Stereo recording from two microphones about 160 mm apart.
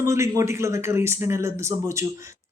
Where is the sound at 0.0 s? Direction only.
20° right (ahead or behind).